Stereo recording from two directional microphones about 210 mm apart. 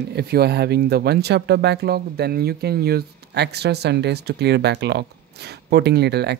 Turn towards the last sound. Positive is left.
turn(degrees=-50)  # may be behind; listen again after turning